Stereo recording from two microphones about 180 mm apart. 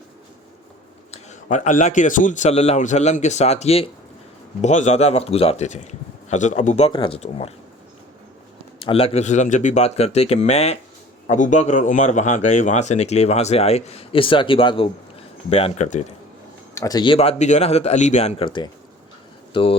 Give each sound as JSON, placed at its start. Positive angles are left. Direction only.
{"t": 1.1, "sound": "speech", "side_deg": 40}
{"t": 8.8, "sound": "speech", "side_deg": 30}
{"t": 16.7, "sound": "speech", "side_deg": 20}